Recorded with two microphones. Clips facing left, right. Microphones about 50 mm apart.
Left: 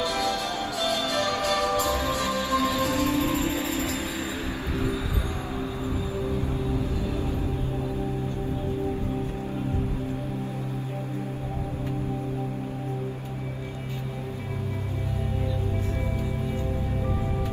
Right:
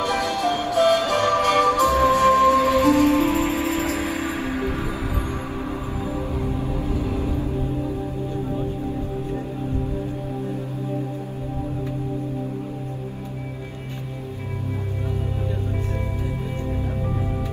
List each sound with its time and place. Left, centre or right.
0.0 s music: right
6.7 s music: right